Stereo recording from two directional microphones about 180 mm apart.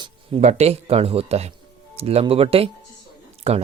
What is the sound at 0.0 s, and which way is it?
Speech, 35° right (ahead or behind).